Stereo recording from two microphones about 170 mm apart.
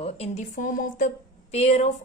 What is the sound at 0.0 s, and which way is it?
A woman's voice, 40° left (ahead or behind).